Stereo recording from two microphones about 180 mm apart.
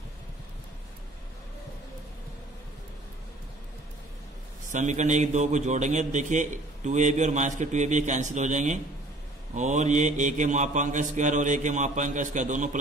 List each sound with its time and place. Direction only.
4.6 s a man's voice: 40° right (ahead or behind)